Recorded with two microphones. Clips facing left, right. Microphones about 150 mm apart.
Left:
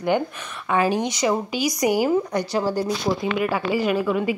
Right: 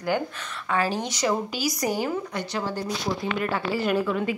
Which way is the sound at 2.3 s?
40° left (ahead or behind).